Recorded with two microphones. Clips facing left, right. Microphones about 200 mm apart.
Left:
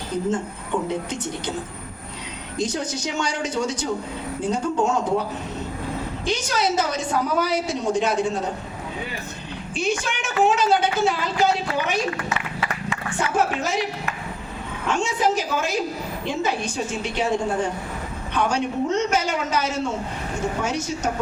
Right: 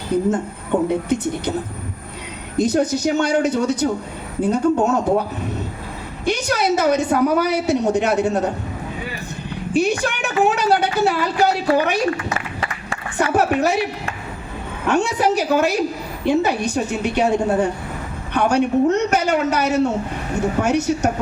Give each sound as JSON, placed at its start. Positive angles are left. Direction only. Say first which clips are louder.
{"t": 0.3, "sound": "a woman's voice", "louder": "right 5 dB", "side_deg": -60}
{"t": 2.6, "sound": "a woman's voice", "louder": "right 9 dB", "side_deg": -60}
{"t": 6.2, "sound": "a woman's voice", "louder": "right 5 dB", "side_deg": -60}
{"t": 9.7, "sound": "a woman's voice", "louder": "right 6 dB", "side_deg": -60}
{"t": 12.3, "sound": "a sound", "louder": "right 1 dB", "side_deg": -40}
{"t": 13.1, "sound": "a woman's voice", "louder": "right 6 dB", "side_deg": -60}
{"t": 14.8, "sound": "a woman's voice", "louder": "right 4 dB", "side_deg": -60}